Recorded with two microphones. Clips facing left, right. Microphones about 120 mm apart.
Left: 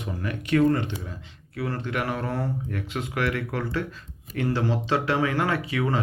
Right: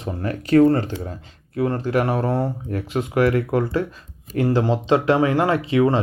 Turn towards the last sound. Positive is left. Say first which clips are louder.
# right 8 dB
turn(degrees=-30)  # may be behind; listen again after turning